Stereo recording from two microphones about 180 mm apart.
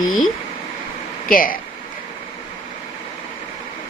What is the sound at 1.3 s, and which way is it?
Speech, 50° left (ahead or behind).